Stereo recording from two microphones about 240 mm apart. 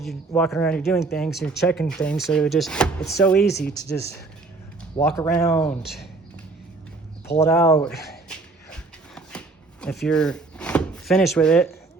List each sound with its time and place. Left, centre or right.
0.0 s speech: centre
3.5 s speech: left
4.9 s speech: centre
7.3 s speech: centre
9.8 s speech: centre